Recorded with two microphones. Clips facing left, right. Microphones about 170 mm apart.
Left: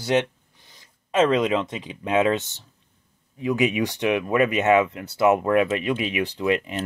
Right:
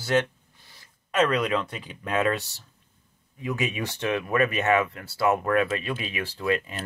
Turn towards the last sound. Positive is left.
turn(degrees=20)  # may be behind; listen again after turning